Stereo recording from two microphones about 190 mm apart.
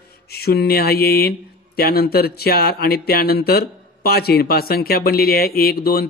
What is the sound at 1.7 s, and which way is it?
Speech, 55° left (ahead or behind).